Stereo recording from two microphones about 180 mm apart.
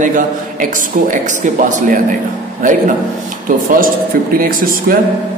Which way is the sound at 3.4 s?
50° right (ahead or behind).